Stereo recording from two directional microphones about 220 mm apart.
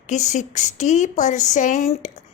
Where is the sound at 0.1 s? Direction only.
30° left (ahead or behind).